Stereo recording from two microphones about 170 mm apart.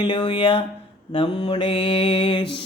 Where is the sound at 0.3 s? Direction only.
30° left (ahead or behind).